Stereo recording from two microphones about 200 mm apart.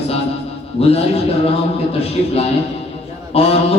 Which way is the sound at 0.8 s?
30° left (ahead or behind).